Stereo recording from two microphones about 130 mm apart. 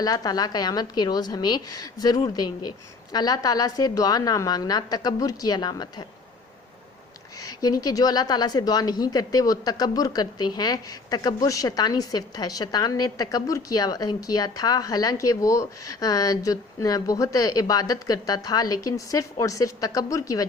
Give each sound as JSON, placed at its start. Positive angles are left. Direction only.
{"t": 0.0, "sound": "a woman's voice", "side_deg": 30}
{"t": 7.6, "sound": "a woman's voice", "side_deg": 30}